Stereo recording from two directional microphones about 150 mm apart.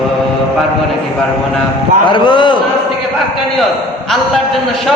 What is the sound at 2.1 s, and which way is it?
Speech, 30° left (ahead or behind).